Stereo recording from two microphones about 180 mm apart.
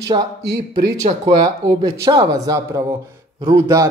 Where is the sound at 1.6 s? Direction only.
20° right (ahead or behind).